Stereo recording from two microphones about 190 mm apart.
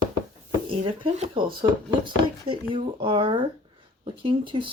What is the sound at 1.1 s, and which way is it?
Speech, 30° right (ahead or behind).